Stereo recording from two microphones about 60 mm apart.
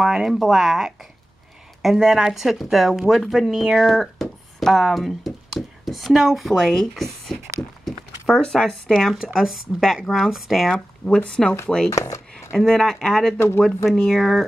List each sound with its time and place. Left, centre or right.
0.0 s speech: centre
9.1 s speech: centre
11.1 s speech: centre
11.9 s chopping: left
12.5 s speech: centre